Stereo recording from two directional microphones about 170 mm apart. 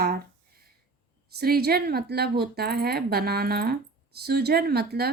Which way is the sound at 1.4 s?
65° right (ahead or behind).